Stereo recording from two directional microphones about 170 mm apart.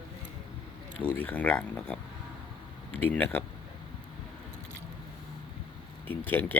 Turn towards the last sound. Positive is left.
turn(degrees=10)  # may be behind; listen again after turning